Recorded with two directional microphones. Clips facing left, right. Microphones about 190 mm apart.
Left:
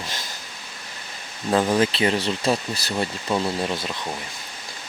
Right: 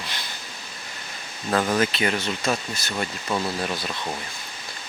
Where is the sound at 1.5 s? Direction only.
25° left (ahead or behind).